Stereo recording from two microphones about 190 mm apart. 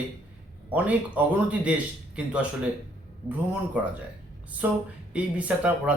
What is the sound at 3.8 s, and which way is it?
Speech, 10° right (ahead or behind).